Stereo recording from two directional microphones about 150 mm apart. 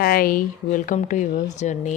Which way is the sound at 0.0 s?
75° left (ahead or behind).